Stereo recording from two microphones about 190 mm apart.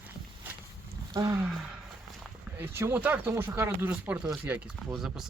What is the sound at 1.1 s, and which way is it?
Speech, 20° right (ahead or behind).